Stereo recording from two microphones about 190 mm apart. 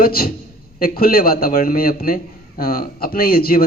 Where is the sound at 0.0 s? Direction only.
50° left (ahead or behind).